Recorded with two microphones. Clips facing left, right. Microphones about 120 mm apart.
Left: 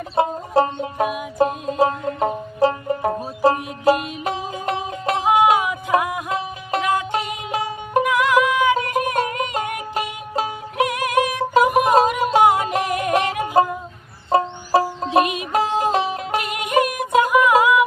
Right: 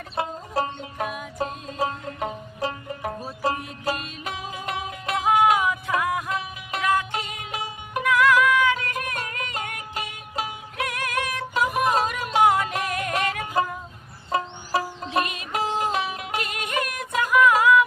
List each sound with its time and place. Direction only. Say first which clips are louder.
0.2 s music: left 9 dB; 30° left (ahead or behind)
1.8 s music: left 8 dB; 30° left (ahead or behind)
6.3 s music: left 6 dB; 30° left (ahead or behind)
8.0 s music: even; 20° left (ahead or behind)
10.8 s music: left 9 dB; 20° left (ahead or behind)
15.1 s music: left 8 dB; 20° left (ahead or behind)
15.5 s music: left 6 dB; 35° left (ahead or behind)
16.4 s music: left 10 dB; 20° left (ahead or behind)